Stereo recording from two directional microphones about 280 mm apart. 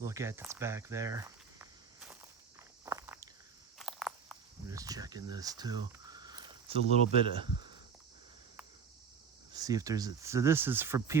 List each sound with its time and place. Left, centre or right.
0.0 s snake: centre
2.8 s walk: centre
3.8 s a sound: centre
4.6 s speech: centre
9.5 s speech: centre